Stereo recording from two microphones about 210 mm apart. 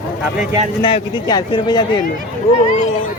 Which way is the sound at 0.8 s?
20° left (ahead or behind).